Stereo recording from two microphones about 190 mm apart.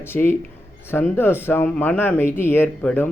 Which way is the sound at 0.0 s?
10° left (ahead or behind).